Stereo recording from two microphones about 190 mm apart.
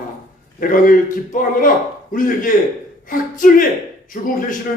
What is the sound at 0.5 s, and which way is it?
Speech, 45° left (ahead or behind).